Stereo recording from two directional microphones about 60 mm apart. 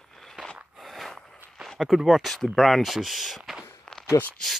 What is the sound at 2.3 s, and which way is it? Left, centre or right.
Speech, centre.